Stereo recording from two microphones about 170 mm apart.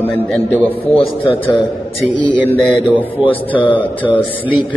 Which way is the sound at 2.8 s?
10° right (ahead or behind).